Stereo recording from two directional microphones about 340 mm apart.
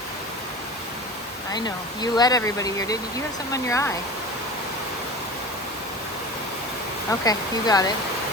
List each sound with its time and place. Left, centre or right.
1.5 s speech: centre
7.1 s speech: centre